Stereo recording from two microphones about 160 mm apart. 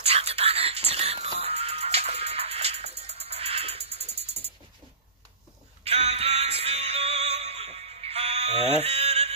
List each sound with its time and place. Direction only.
0.0 s music: 40° right (ahead or behind)
4.0 s music: 35° left (ahead or behind)
5.9 s music: 40° right (ahead or behind)
8.7 s a sound: 40° right (ahead or behind)